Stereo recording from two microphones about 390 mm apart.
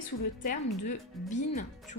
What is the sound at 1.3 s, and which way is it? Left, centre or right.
Speech, centre.